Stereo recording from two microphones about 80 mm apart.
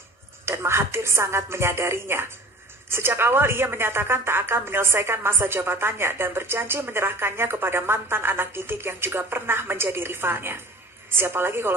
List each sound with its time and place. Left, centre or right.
0.5 s a woman's voice: right